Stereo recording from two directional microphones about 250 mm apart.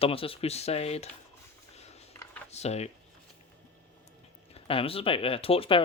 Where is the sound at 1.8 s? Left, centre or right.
Left.